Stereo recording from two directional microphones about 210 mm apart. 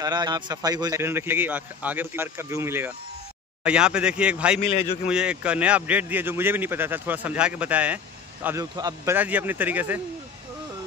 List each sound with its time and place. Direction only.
0.0 s a man's voice: 20° right (ahead or behind)
4.6 s a man's voice: 30° left (ahead or behind)
5.0 s a man's voice: 5° right (ahead or behind)